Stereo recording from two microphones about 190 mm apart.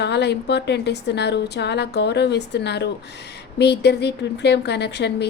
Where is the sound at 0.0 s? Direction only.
60° left (ahead or behind).